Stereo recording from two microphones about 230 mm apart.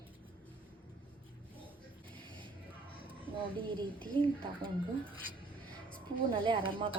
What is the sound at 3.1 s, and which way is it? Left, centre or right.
A woman's voice, right.